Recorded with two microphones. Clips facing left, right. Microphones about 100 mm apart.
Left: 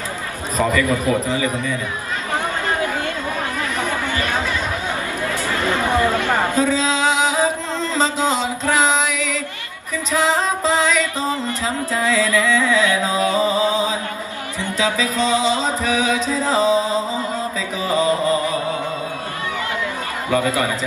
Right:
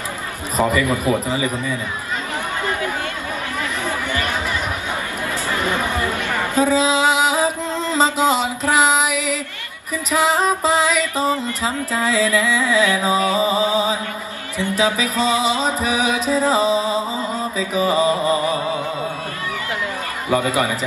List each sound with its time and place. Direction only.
0.6 s a man's voice: 15° right (ahead or behind)
6.2 s chatter: 50° left (ahead or behind)
6.5 s mantra: 15° right (ahead or behind)
10.1 s music: 15° right (ahead or behind)
17.7 s a man's voice: 20° right (ahead or behind)
20.2 s a man's voice: 20° right (ahead or behind)